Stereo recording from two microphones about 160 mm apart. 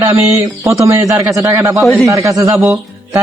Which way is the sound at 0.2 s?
20° right (ahead or behind).